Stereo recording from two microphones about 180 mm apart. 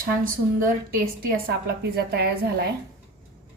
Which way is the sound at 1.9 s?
60° right (ahead or behind).